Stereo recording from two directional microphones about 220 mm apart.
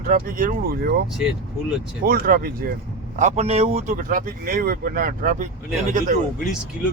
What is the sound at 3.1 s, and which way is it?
Speech, 30° right (ahead or behind).